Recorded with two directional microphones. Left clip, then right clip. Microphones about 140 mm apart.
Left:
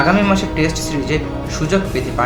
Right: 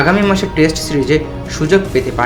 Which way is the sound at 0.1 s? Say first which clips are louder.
Right 2 dB; 30° right (ahead or behind).